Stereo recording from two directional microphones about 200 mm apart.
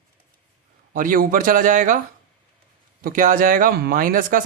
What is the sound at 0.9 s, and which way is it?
Speech, 45° right (ahead or behind).